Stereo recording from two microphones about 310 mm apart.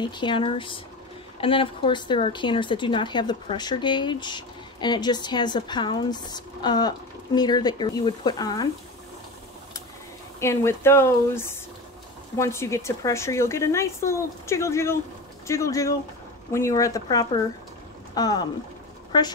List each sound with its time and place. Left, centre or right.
0.0 s a woman's voice: centre
10.4 s a woman's voice: centre